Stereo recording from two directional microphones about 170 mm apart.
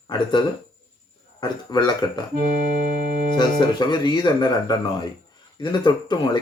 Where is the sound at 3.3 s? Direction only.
25° left (ahead or behind).